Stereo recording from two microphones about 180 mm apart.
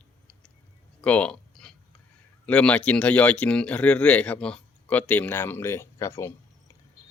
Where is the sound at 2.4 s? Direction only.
5° left (ahead or behind).